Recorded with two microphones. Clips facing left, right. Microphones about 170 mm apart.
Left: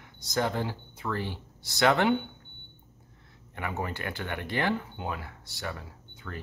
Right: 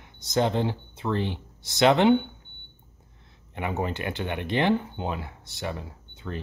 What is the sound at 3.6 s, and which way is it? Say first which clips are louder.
Speech: right 5 dB; 20° right (ahead or behind).